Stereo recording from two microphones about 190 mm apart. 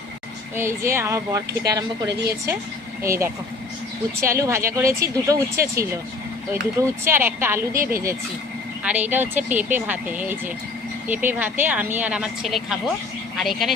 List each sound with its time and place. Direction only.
0.5 s a woman's voice: 15° right (ahead or behind)
3.0 s a woman's voice: 15° right (ahead or behind)
8.8 s a woman's voice: 10° right (ahead or behind)